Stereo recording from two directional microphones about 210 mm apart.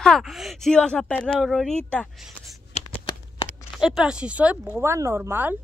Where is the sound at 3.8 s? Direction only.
5° right (ahead or behind).